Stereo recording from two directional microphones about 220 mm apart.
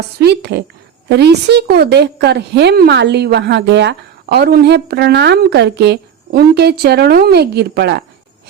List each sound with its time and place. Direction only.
0.2 s a woman's voice: 50° right (ahead or behind)